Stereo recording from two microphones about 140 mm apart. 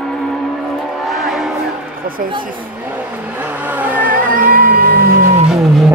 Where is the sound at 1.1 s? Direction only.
Centre (ahead or behind).